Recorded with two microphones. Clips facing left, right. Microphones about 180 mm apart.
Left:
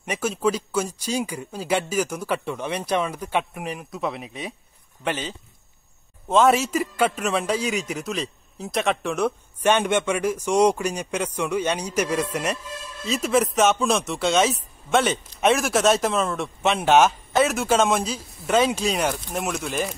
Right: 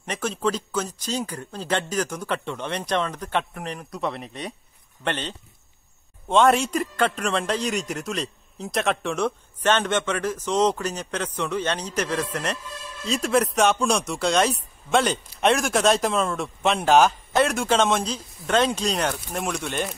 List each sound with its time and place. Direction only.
0.0 s a man's voice: 10° left (ahead or behind)